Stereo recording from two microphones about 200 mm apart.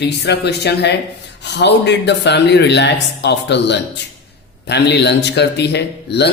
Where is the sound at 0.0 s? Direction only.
55° left (ahead or behind).